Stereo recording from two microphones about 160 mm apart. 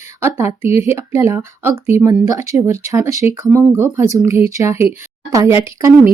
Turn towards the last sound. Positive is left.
turn(degrees=-20)  # may be behind; listen again after turning